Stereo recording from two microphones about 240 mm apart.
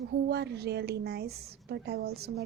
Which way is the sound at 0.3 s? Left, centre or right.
Right.